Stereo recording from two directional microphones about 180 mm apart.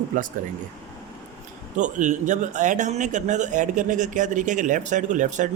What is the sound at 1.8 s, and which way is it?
Speech, 45° right (ahead or behind).